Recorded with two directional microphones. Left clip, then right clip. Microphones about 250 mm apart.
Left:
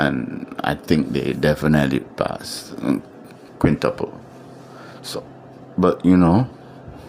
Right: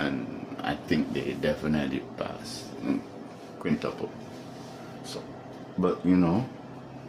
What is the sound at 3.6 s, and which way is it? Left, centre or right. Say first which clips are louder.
Speech: left 12 dB; left.